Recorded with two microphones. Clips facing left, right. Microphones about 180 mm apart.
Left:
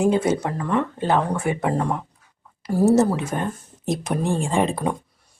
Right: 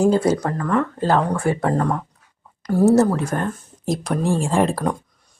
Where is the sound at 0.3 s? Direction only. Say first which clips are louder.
Right 2 dB; 20° left (ahead or behind).